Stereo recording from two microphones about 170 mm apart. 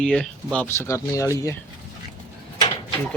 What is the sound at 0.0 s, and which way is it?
Speech, 5° left (ahead or behind).